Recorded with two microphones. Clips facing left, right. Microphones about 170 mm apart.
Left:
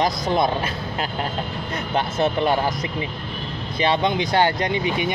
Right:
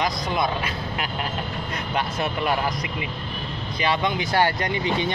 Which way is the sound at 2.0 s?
30° left (ahead or behind).